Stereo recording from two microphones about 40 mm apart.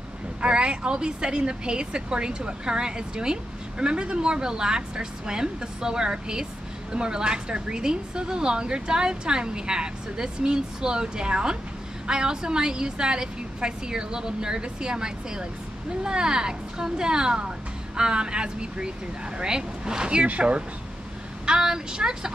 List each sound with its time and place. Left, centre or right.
0.4 s a woman's voice: right
20.2 s speech: right
21.5 s speech: centre